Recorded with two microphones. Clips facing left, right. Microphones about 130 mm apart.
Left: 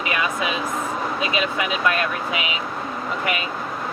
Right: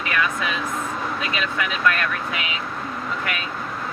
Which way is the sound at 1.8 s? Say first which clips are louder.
Right 2 dB; 20° left (ahead or behind).